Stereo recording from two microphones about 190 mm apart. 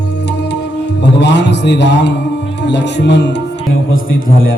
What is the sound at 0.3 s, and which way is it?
Music, 65° left (ahead or behind).